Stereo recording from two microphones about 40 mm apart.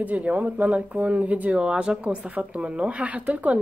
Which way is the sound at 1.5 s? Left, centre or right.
Right.